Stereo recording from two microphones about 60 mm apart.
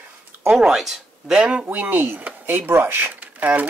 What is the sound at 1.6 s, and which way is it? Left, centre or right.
Speech, right.